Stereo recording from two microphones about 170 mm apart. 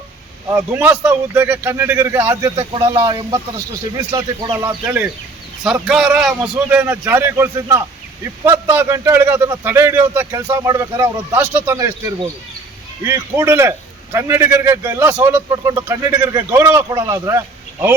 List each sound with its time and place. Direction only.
0.4 s a man's voice: 15° right (ahead or behind)
4.5 s a man's voice: 15° right (ahead or behind)
5.9 s a man's voice: centre (ahead or behind)